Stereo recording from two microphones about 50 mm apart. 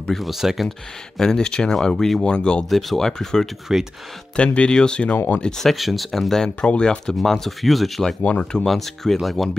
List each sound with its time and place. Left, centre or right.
0.1 s speech: centre
0.7 s speech: centre
2.2 s speech: centre
2.7 s speech: centre
3.7 s speech: centre
4.4 s speech: left
5.1 s speech: left
5.4 s speech: centre
7.2 s speech: centre
8.2 s speech: left
8.6 s speech: centre